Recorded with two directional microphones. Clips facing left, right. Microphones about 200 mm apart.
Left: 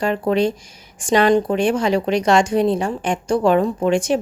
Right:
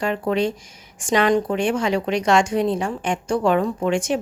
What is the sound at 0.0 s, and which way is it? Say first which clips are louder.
A woman's voice: left 3 dB; 35° left (ahead or behind).